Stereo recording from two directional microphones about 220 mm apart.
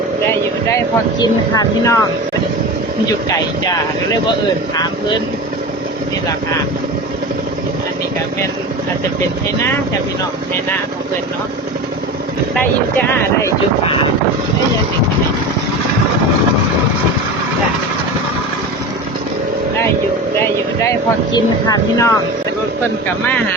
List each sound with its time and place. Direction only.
1.2 s speech: 15° left (ahead or behind)
21.3 s speech: 15° left (ahead or behind)